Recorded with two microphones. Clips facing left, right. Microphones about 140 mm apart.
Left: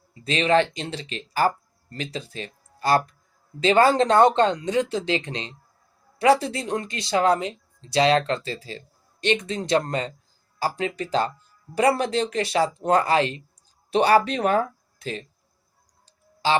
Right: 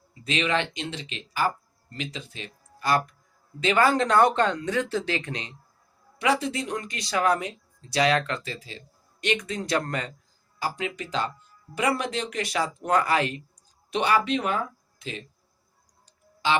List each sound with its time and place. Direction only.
0.3 s speech: 35° left (ahead or behind)
10.6 s speech: 35° left (ahead or behind)
16.0 s clicking: 35° left (ahead or behind)